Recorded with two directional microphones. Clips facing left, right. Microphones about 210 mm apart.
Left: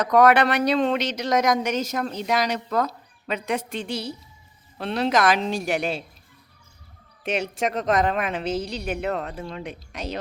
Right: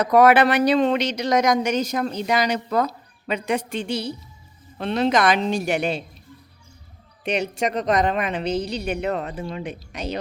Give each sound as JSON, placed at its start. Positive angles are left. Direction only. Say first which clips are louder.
{"t": 0.0, "sound": "speech", "louder": "right 2 dB", "side_deg": -5}
{"t": 7.3, "sound": "speech", "louder": "right 2 dB", "side_deg": 0}